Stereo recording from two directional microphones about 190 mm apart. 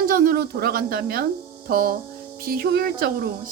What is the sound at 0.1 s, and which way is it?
Speech, 50° right (ahead or behind).